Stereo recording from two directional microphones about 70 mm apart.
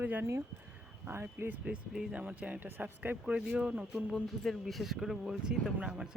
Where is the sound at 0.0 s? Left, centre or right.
Right.